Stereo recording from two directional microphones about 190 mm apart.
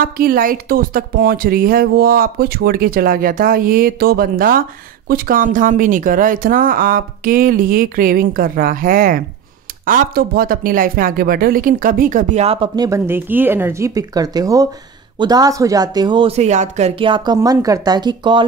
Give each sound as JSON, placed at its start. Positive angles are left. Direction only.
{"t": 0.0, "sound": "a woman's voice", "side_deg": -50}